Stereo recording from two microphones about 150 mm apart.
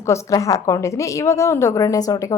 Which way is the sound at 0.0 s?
20° left (ahead or behind).